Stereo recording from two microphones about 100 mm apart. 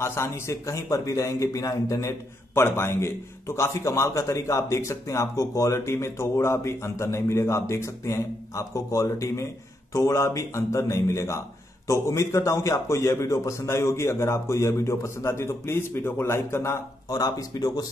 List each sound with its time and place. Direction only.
0.0 s a man's voice: 25° left (ahead or behind)